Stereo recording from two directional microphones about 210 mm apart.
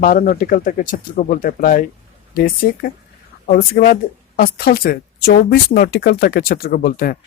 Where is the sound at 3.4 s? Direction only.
45° left (ahead or behind).